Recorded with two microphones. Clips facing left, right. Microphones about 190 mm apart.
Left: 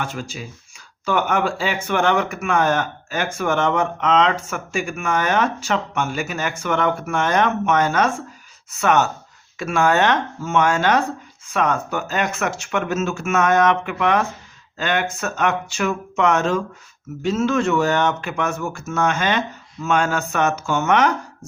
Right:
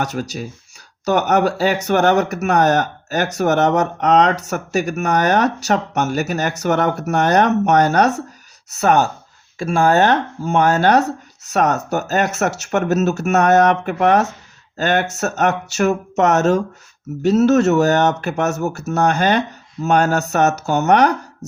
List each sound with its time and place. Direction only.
0.0 s speech: 40° right (ahead or behind)